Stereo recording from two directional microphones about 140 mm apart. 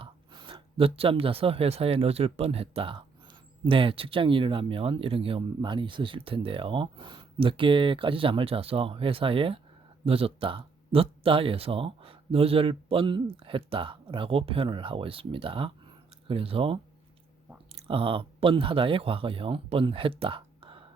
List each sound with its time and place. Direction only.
0.0 s speech: 40° right (ahead or behind)
17.8 s speech: 40° right (ahead or behind)